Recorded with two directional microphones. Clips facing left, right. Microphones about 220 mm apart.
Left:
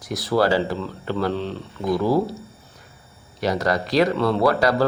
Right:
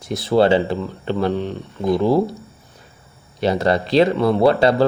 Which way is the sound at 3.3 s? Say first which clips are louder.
Right 4 dB; 25° right (ahead or behind).